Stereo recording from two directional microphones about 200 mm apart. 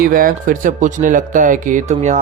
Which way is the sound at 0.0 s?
45° right (ahead or behind).